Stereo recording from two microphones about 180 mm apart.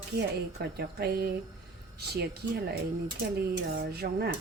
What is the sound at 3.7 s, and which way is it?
Speech, 60° right (ahead or behind).